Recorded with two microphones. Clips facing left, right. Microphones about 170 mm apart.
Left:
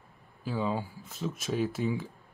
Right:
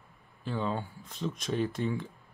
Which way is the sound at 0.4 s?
5° left (ahead or behind).